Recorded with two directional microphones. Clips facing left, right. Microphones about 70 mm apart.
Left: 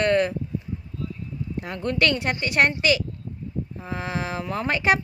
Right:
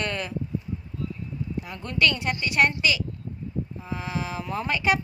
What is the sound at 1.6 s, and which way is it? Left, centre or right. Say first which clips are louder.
Speech: left 2 dB; left.